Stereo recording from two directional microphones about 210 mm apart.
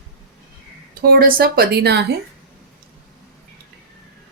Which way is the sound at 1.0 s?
45° right (ahead or behind).